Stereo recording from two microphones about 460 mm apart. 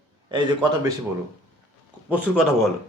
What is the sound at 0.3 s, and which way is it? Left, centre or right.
Speech, centre.